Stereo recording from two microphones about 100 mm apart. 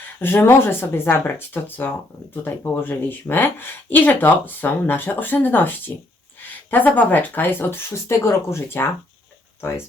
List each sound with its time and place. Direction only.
0.2 s speech: 20° left (ahead or behind)